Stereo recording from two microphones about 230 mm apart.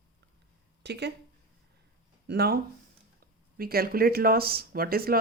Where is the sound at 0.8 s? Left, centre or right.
Right.